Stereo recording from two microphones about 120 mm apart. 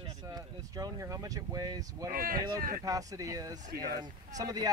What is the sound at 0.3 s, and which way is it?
Speech, 30° right (ahead or behind).